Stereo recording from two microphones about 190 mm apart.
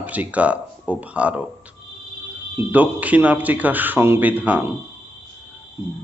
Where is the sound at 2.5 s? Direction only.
10° right (ahead or behind).